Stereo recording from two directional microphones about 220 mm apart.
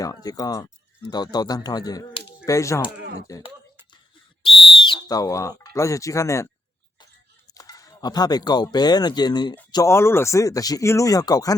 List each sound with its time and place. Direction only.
0.0 s speech: 15° left (ahead or behind)
3.0 s speech: 50° right (ahead or behind)
3.2 s speech: 15° left (ahead or behind)
4.7 s speech: 20° left (ahead or behind)
7.0 s a sound: 15° left (ahead or behind)
9.7 s speech: 10° left (ahead or behind)